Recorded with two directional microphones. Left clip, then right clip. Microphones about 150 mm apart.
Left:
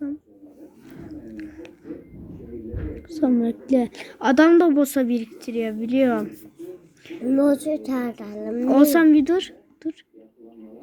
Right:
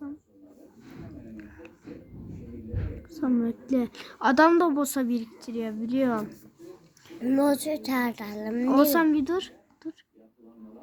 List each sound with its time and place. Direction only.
1.4 s music: 10° left (ahead or behind)
3.1 s a woman's voice: 10° left (ahead or behind)
7.3 s a child's voice: 30° right (ahead or behind)
8.7 s a woman's voice: 5° left (ahead or behind)